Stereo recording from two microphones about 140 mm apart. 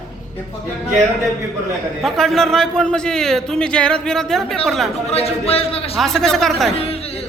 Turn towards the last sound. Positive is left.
turn(degrees=0)  # may be behind; listen again after turning